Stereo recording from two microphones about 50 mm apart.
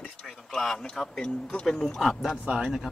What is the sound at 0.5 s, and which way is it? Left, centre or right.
Speech, centre.